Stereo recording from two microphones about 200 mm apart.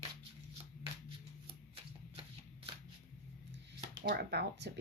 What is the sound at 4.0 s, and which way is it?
Speech, 50° right (ahead or behind).